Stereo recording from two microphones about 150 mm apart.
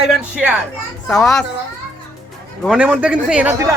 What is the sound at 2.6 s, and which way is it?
Speech, 5° right (ahead or behind).